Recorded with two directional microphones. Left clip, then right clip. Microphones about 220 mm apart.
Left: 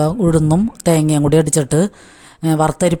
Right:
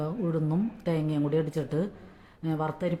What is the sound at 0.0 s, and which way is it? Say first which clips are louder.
Speech: left 15 dB; 50° left (ahead or behind).